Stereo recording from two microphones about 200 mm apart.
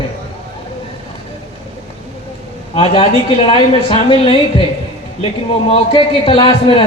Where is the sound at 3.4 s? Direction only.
25° left (ahead or behind).